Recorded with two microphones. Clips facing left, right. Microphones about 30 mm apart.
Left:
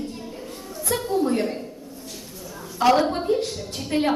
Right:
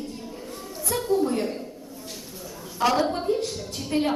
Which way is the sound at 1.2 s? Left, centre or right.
Left.